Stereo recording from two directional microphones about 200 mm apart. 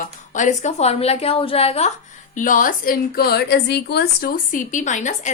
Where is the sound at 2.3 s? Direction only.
40° left (ahead or behind).